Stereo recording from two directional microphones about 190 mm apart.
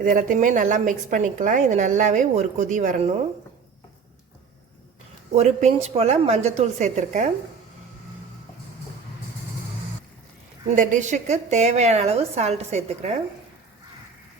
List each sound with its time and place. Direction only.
0.0 s a woman's voice: 45° right (ahead or behind)
5.3 s a woman's voice: 35° right (ahead or behind)
10.8 s a woman's voice: 40° right (ahead or behind)